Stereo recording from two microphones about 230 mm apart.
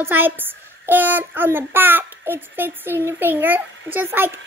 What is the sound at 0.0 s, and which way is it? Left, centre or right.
A woman's voice, centre.